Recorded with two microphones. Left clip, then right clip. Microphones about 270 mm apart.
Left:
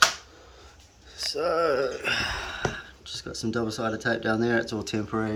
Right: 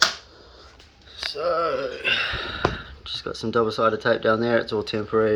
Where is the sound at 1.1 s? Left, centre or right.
Centre.